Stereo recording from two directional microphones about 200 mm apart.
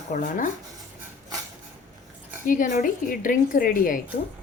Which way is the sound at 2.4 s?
40° left (ahead or behind).